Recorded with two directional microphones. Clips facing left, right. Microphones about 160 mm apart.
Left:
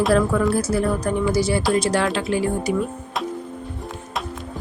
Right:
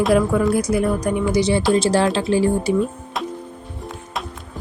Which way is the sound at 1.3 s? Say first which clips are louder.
Right 3 dB; 20° right (ahead or behind).